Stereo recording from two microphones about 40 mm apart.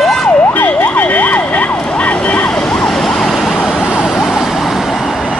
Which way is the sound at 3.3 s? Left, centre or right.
Centre.